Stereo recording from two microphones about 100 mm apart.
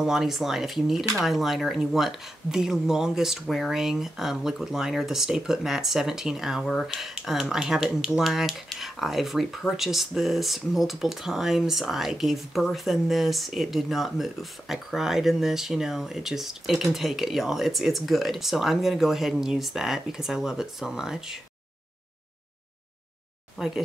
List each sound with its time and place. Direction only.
0.0 s speech: 5° right (ahead or behind)
23.6 s speech: centre (ahead or behind)